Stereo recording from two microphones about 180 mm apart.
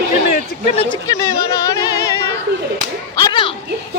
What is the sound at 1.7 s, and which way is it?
Music, 15° left (ahead or behind).